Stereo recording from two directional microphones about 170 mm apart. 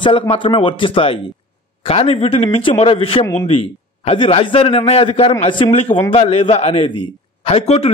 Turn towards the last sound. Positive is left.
turn(degrees=40)  # may be behind; listen again after turning